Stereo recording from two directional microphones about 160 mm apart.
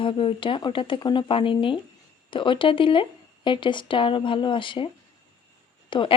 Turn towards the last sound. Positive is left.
turn(degrees=30)  # may be behind; listen again after turning